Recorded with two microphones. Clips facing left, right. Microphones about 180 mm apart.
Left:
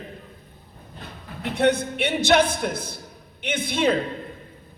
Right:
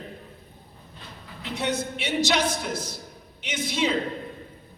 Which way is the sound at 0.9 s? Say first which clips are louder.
Left 5 dB; 55° left (ahead or behind).